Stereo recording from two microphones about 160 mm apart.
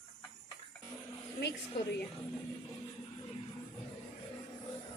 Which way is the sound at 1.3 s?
90° left.